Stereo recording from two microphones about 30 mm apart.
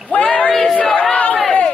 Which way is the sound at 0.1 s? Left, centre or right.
Left.